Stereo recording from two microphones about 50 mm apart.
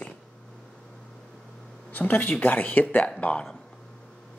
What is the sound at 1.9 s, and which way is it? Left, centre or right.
Speech, left.